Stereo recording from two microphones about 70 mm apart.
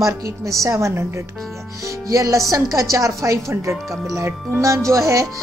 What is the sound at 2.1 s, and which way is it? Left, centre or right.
Speech, right.